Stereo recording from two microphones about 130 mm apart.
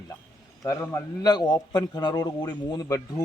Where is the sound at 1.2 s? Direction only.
30° left (ahead or behind).